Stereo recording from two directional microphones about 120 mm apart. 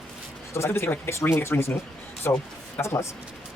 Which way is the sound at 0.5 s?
20° left (ahead or behind).